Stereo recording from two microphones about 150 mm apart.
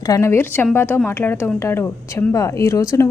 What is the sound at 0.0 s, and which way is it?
A woman's voice, 20° left (ahead or behind).